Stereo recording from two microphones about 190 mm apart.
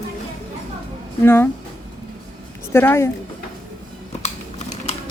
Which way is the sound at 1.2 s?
10° left (ahead or behind).